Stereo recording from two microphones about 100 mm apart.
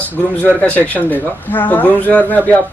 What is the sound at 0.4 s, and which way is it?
Speech, 15° left (ahead or behind).